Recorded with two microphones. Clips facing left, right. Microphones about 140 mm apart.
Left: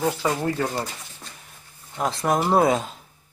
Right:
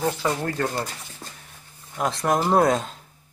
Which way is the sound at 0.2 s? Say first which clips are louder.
Left 1 dB; 15° left (ahead or behind).